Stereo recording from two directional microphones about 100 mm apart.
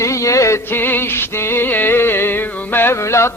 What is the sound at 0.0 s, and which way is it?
Music, 30° left (ahead or behind).